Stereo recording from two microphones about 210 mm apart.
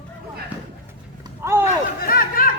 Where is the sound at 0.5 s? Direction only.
5° right (ahead or behind).